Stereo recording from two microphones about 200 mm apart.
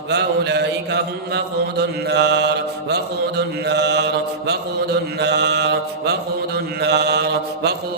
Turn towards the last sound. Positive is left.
turn(degrees=-55)  # may be behind; listen again after turning